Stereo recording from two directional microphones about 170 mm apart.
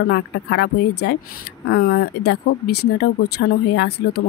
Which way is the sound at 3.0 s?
75° left (ahead or behind).